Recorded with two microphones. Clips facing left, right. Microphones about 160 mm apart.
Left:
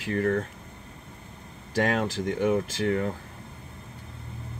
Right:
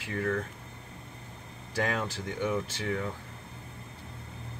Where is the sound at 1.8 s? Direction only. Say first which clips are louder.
Left 7 dB; 90° left; by 3.0 s 75° left (ahead or behind).